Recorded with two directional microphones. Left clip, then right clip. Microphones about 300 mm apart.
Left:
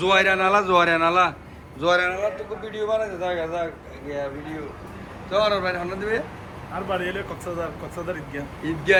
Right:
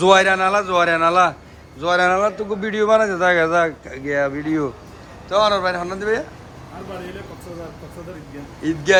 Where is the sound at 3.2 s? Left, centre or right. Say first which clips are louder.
Right 10 dB; right.